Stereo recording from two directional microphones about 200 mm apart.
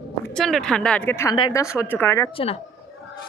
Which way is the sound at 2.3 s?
30° left (ahead or behind).